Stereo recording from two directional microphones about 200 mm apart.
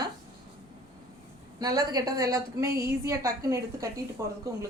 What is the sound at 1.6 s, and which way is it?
A woman's voice, 20° right (ahead or behind).